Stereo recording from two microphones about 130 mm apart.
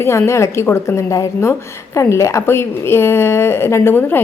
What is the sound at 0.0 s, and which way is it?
A woman's voice, 20° left (ahead or behind).